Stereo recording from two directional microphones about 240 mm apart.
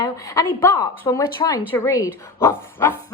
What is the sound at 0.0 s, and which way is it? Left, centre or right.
A woman's voice, centre.